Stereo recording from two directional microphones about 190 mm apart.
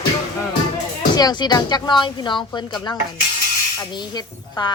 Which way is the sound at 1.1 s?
20° left (ahead or behind).